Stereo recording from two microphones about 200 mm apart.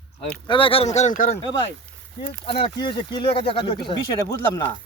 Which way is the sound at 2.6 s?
25° left (ahead or behind).